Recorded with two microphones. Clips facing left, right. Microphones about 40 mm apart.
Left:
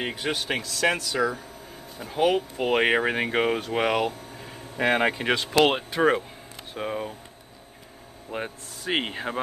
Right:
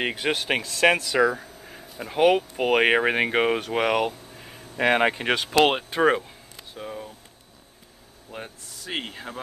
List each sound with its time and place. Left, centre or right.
0.0 s speech: right; by 4.6 s centre
4.7 s speech: centre
6.7 s speech: left
8.3 s speech: left